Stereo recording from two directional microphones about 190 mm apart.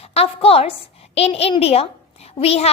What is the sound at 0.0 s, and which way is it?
A woman's voice, 30° left (ahead or behind).